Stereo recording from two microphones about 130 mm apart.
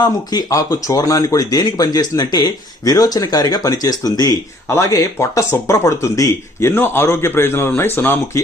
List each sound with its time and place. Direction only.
0.0 s a man's voice: 30° left (ahead or behind)